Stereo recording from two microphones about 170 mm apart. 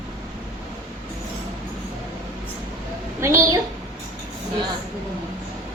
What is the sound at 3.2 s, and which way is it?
Speech, 20° right (ahead or behind).